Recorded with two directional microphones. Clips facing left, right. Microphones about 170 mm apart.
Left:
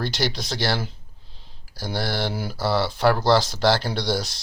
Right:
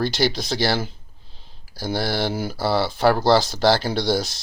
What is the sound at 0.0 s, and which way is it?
Speech, 5° right (ahead or behind).